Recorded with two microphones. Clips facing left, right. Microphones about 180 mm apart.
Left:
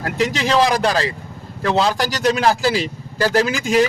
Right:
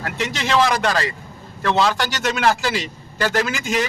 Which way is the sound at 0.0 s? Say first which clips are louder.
Left 5 dB; 35° left (ahead or behind).